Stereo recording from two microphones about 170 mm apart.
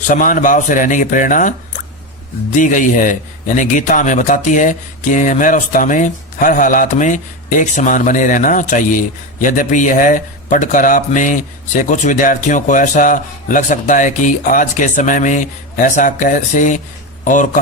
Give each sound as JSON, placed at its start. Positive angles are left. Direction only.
{"t": 0.1, "sound": "a man's voice", "side_deg": 50}
{"t": 2.6, "sound": "a man's voice", "side_deg": 50}